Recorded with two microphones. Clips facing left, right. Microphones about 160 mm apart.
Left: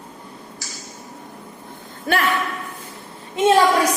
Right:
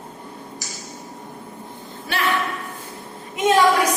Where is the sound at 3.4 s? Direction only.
30° left (ahead or behind).